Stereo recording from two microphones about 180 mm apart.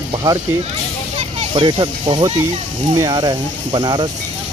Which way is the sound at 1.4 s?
30° right (ahead or behind).